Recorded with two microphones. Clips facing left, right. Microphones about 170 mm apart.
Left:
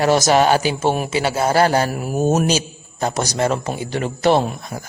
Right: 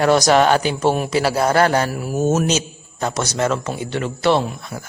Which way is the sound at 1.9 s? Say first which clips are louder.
Left 1 dB; 15° left (ahead or behind).